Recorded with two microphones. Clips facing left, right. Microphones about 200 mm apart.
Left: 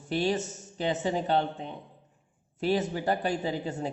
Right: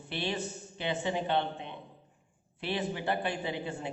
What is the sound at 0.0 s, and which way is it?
A man's voice, 45° left (ahead or behind).